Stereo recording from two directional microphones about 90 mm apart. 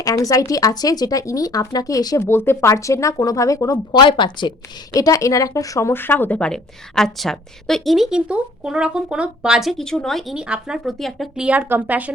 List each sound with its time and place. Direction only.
0.0 s speech: 40° left (ahead or behind)
2.1 s speech: 30° left (ahead or behind)
3.9 s speech: 60° left (ahead or behind)
4.9 s speech: 40° left (ahead or behind)
5.9 s a woman's voice: 25° left (ahead or behind); by 10.3 s 5° left (ahead or behind)
10.3 s speech: 10° right (ahead or behind)
11.3 s speech: 15° right (ahead or behind)